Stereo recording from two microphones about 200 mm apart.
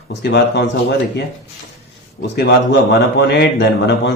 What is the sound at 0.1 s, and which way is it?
Speech, 55° left (ahead or behind).